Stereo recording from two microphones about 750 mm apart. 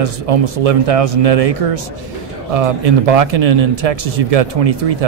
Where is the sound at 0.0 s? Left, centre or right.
Right.